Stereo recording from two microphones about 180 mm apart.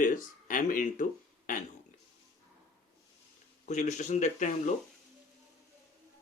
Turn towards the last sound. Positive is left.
turn(degrees=40)  # may be behind; listen again after turning